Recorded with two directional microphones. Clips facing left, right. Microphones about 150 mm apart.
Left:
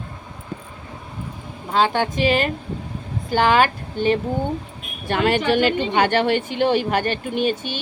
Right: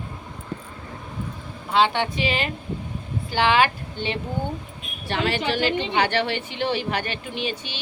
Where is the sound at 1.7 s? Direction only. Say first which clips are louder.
Left 1 dB; 45° left (ahead or behind).